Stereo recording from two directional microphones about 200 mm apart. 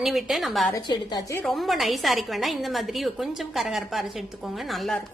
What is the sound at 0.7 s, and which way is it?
Speech, 20° left (ahead or behind).